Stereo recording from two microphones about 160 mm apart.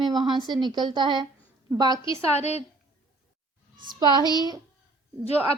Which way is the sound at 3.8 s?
25° right (ahead or behind).